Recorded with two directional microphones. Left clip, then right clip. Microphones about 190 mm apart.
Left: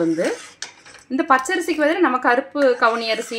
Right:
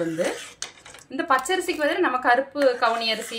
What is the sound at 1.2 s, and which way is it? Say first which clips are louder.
A woman's voice: left 4 dB; 55° left (ahead or behind).